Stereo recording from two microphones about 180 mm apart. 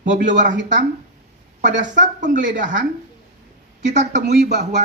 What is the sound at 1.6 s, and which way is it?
A woman's voice, 45° right (ahead or behind).